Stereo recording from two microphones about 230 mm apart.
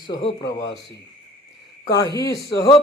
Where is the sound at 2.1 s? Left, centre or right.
Centre.